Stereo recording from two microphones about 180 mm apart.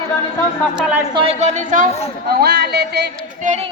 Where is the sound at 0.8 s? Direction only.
10° right (ahead or behind).